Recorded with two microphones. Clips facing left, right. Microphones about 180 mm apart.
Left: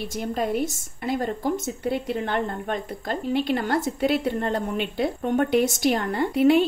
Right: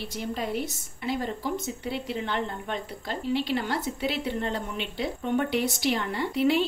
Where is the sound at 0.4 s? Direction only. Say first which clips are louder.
Left 8 dB; 50° left (ahead or behind).